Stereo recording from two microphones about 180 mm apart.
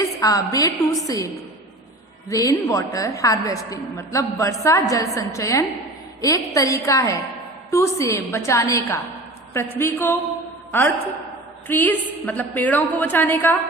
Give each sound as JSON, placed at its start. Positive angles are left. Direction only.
{"t": 0.0, "sound": "a woman's voice", "side_deg": 20}
{"t": 2.3, "sound": "a woman's voice", "side_deg": 20}